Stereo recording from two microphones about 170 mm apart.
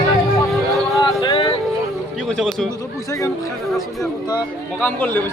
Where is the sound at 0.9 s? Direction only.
30° left (ahead or behind).